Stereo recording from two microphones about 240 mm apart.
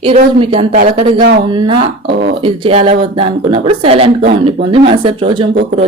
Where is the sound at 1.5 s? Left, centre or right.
Centre.